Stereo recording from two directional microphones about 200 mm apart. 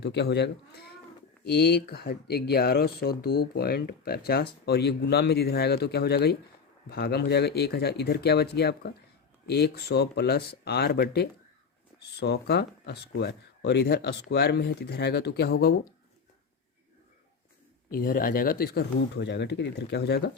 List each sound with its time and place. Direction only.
0.0 s speech: 60° left (ahead or behind)
17.9 s speech: 45° left (ahead or behind)